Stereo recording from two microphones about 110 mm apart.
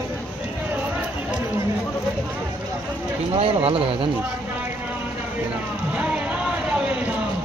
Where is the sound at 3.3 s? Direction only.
65° right (ahead or behind).